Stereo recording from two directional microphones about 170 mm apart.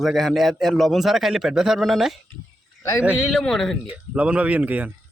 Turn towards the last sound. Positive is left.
turn(degrees=-10)  # may be behind; listen again after turning